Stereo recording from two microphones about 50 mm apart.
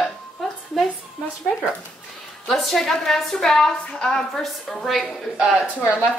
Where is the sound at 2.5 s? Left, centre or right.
Centre.